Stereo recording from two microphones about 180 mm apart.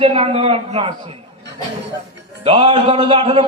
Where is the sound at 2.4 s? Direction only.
30° right (ahead or behind).